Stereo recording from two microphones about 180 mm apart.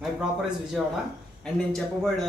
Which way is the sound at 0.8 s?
Centre (ahead or behind).